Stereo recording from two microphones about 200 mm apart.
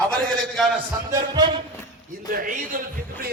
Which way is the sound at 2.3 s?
45° right (ahead or behind).